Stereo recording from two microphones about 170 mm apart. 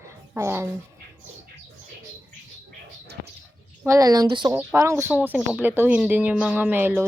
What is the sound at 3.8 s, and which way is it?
Speech, 20° right (ahead or behind).